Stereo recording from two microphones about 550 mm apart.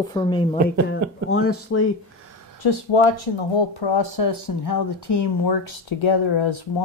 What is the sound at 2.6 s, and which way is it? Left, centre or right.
Speech, left.